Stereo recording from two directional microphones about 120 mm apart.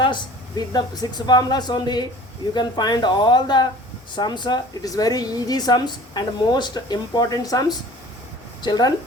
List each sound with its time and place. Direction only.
0.0 s speech: 35° left (ahead or behind)